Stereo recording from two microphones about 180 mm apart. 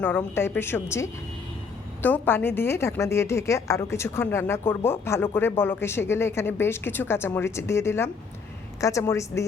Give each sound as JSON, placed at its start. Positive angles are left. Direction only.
{"t": 0.3, "sound": "a woman's voice", "side_deg": 15}